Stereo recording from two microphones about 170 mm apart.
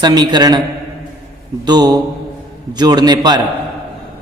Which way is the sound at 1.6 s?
25° right (ahead or behind).